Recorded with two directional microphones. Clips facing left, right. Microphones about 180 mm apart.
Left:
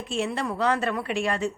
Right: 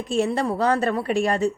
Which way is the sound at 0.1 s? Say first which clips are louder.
Right 6 dB; 40° right (ahead or behind).